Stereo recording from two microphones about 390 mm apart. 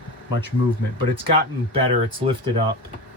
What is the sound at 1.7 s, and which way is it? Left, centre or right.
Speech, centre.